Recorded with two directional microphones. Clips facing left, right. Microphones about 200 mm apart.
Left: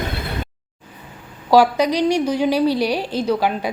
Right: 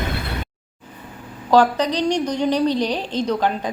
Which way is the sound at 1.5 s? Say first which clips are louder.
Left 2 dB; 10° left (ahead or behind).